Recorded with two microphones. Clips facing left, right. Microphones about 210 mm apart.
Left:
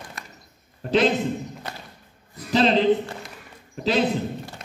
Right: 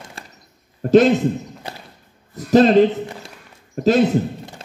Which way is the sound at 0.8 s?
45° right (ahead or behind).